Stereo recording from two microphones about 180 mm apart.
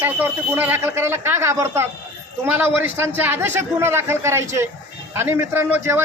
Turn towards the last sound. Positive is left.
turn(degrees=-10)  # may be behind; listen again after turning